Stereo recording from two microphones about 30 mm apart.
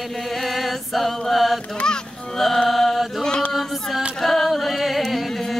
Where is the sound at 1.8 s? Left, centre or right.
Left.